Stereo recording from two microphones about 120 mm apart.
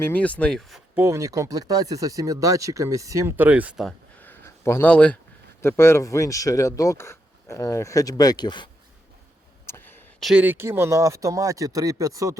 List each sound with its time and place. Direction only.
0.0 s speech: 15° left (ahead or behind)
0.9 s speech: 25° right (ahead or behind)
3.3 s speech: 15° right (ahead or behind)
4.2 s a sound: 20° left (ahead or behind)
4.9 s speech: 10° left (ahead or behind)
5.6 s speech: 20° left (ahead or behind); by 8.7 s 40° left (ahead or behind)
9.6 s a sound: 20° left (ahead or behind)
10.2 s speech: centre (ahead or behind)
10.4 s speech: 15° right (ahead or behind)